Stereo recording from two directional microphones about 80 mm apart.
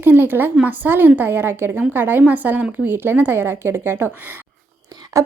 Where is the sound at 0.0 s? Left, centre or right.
Right.